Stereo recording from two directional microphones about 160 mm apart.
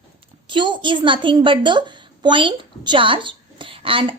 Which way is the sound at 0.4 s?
30° right (ahead or behind).